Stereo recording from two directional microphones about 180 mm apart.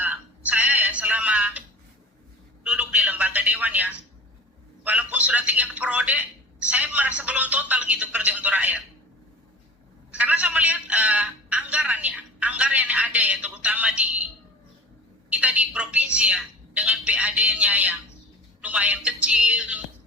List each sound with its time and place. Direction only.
0.0 s a sound: 10° right (ahead or behind)
2.6 s telephone: 5° right (ahead or behind)
4.8 s a man's voice: 10° right (ahead or behind)
10.1 s a man's voice: 5° right (ahead or behind)
15.3 s a man's voice: 10° right (ahead or behind)